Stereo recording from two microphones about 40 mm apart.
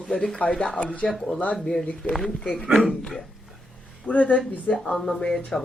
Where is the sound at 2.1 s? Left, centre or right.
Centre.